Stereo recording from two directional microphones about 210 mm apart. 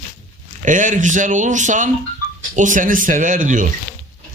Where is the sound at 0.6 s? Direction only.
40° right (ahead or behind).